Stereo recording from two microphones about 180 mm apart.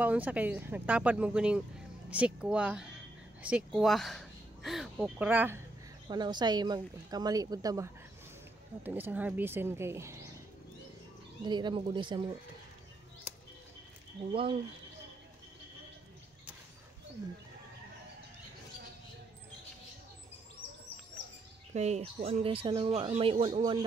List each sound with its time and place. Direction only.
0.0 s speech: 10° right (ahead or behind)
6.0 s speech: 25° right (ahead or behind)
11.4 s speech: 25° right (ahead or behind)
14.3 s speech: 30° right (ahead or behind)
21.7 s speech: 40° right (ahead or behind)